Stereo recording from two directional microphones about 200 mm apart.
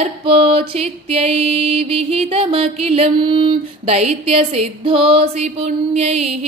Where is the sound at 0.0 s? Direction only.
30° right (ahead or behind).